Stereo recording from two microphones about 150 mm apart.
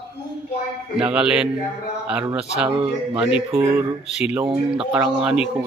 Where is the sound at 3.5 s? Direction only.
15° right (ahead or behind).